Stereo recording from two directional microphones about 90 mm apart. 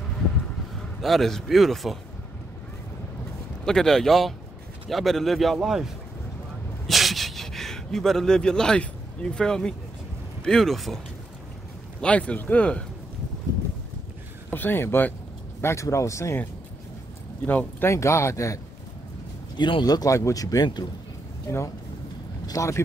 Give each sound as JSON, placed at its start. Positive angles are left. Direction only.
{"t": 1.0, "sound": "a man's voice", "side_deg": 5}
{"t": 3.6, "sound": "a man's voice", "side_deg": 5}
{"t": 6.9, "sound": "a sound", "side_deg": 0}
{"t": 10.4, "sound": "a man's voice", "side_deg": 5}
{"t": 12.0, "sound": "speech", "side_deg": 15}
{"t": 14.5, "sound": "speech", "side_deg": 20}
{"t": 15.6, "sound": "speech", "side_deg": 35}
{"t": 17.5, "sound": "speech", "side_deg": 20}
{"t": 17.8, "sound": "speech", "side_deg": 30}
{"t": 19.5, "sound": "speech", "side_deg": 55}
{"t": 21.5, "sound": "speech", "side_deg": 30}